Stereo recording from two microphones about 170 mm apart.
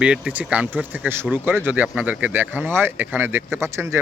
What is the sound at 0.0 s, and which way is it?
Speech, 5° right (ahead or behind).